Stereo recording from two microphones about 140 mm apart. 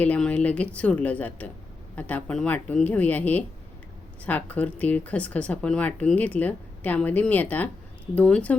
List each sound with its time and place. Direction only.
0.0 s speech: 10° left (ahead or behind)